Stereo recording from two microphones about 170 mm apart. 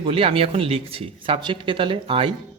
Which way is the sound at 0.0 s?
35° right (ahead or behind).